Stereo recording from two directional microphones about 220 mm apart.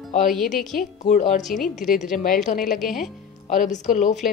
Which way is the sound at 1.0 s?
30° left (ahead or behind).